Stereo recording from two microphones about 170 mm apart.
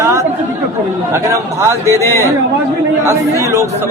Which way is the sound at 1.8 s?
15° left (ahead or behind).